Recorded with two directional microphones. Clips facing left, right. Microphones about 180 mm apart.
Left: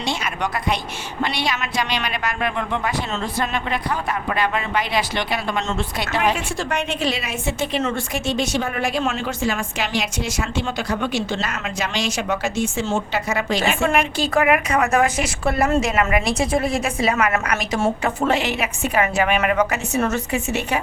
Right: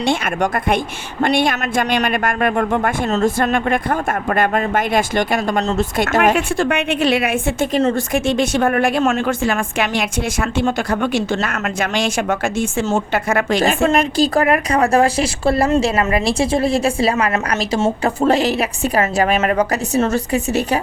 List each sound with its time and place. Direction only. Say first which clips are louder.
0.0 s a woman's voice: right 7 dB; 55° right (ahead or behind)
6.3 s a woman's voice: right 7 dB; 60° right (ahead or behind)
7.8 s a woman's voice: right 10 dB; 30° right (ahead or behind)
8.1 s a woman's voice: right 5 dB; 55° right (ahead or behind)
13.8 s a woman's voice: right 5 dB; 40° right (ahead or behind)